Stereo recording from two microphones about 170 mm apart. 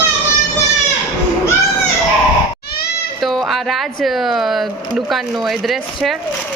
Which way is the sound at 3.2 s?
Centre (ahead or behind).